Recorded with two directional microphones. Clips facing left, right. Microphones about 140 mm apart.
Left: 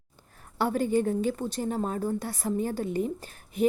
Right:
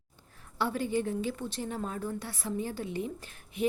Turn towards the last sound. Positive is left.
turn(degrees=40)  # may be behind; listen again after turning